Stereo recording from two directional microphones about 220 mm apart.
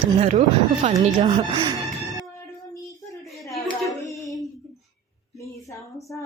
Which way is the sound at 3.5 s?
Centre (ahead or behind).